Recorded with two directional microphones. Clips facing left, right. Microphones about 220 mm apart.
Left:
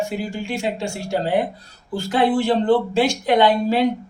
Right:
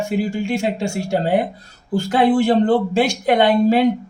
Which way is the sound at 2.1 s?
50° right (ahead or behind).